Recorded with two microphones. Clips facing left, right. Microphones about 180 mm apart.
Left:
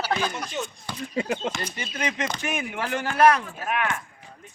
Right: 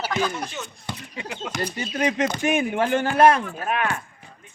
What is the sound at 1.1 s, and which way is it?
Speech, 30° left (ahead or behind).